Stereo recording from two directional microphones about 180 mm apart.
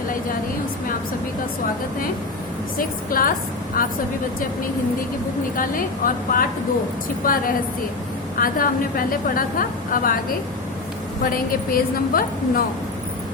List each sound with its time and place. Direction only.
2.7 s a woman's voice: 50° left (ahead or behind)
5.5 s a woman's voice: 50° left (ahead or behind)
8.4 s a woman's voice: 50° left (ahead or behind)
11.3 s a woman's voice: 55° left (ahead or behind)